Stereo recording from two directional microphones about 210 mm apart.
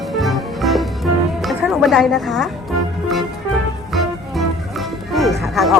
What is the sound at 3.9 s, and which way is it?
Music, centre (ahead or behind).